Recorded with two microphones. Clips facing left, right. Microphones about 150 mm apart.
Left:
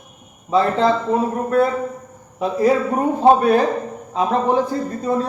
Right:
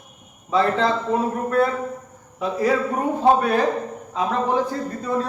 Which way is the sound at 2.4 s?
30° left (ahead or behind).